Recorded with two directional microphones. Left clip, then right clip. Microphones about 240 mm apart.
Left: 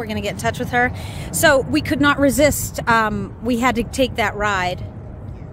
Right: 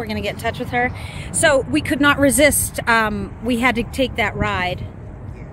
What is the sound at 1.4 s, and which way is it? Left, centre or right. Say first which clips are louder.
Speech: left 1 dB; centre.